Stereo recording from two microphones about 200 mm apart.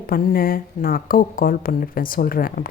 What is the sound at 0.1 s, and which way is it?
Speech, 45° left (ahead or behind).